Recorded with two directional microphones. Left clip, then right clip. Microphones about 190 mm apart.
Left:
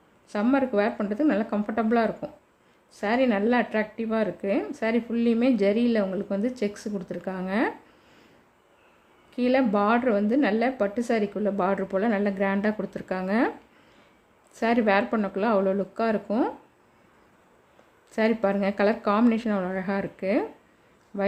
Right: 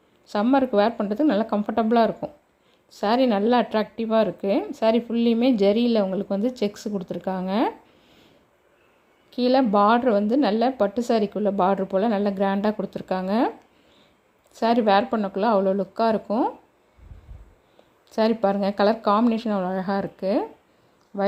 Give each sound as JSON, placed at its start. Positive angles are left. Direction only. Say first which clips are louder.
{"t": 0.3, "sound": "a woman's voice", "louder": "right 4 dB", "side_deg": -20}
{"t": 9.4, "sound": "speech", "louder": "right 4 dB", "side_deg": -15}
{"t": 14.6, "sound": "speech", "louder": "right 3 dB", "side_deg": -10}
{"t": 18.1, "sound": "speech", "louder": "right 3 dB", "side_deg": -10}